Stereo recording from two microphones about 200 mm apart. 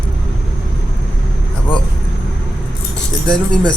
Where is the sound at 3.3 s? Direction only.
5° left (ahead or behind).